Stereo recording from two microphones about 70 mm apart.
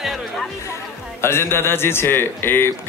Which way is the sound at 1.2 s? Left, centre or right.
Left.